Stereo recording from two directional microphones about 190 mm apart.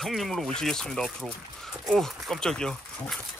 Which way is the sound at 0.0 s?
Centre (ahead or behind).